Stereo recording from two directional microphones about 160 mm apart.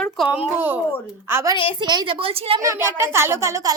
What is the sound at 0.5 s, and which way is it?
A woman's voice, 10° right (ahead or behind).